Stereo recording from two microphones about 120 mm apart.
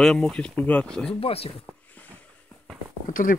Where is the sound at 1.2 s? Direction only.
55° left (ahead or behind).